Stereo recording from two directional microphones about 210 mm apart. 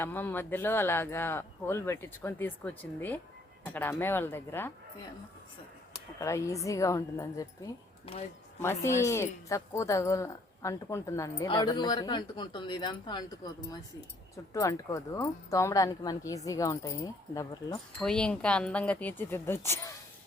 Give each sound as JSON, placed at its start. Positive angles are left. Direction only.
{"t": 0.0, "sound": "speech", "side_deg": 10}
{"t": 6.1, "sound": "speech", "side_deg": 15}
{"t": 18.0, "sound": "speech", "side_deg": 5}